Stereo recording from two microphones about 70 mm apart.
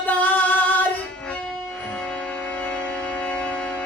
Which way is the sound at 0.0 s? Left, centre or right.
Left.